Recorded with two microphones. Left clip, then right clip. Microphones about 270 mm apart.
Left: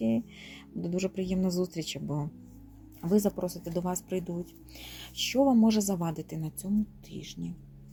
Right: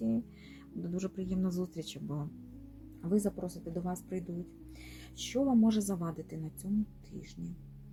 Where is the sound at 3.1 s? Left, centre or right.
Left.